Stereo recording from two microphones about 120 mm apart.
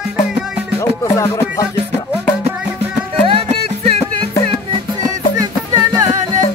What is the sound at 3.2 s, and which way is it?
Music, 50° right (ahead or behind).